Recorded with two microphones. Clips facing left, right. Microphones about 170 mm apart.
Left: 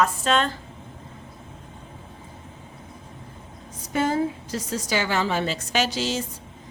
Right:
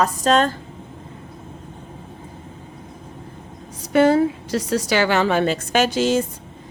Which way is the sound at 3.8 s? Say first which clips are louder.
Right 8 dB; 70° right (ahead or behind).